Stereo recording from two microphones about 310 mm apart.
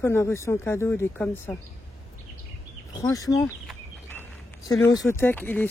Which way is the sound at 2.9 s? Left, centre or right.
Centre.